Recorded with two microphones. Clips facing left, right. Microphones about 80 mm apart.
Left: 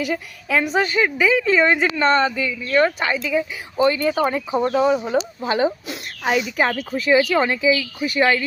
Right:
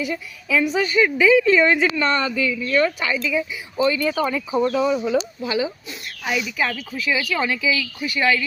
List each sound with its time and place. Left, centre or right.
0.6 s speech: left
7.2 s speech: left